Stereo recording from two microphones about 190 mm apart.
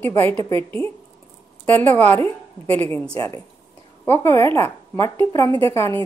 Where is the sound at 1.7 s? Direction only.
10° left (ahead or behind).